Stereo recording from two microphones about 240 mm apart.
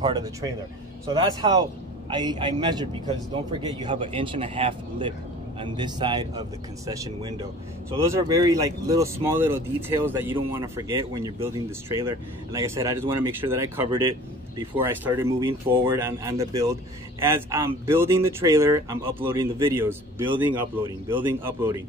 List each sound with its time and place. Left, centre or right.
0.0 s speech: centre